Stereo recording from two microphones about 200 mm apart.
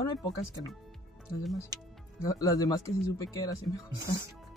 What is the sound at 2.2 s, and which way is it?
Speech, 15° left (ahead or behind).